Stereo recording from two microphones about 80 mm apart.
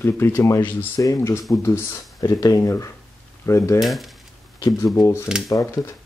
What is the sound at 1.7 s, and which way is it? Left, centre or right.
Speech, left.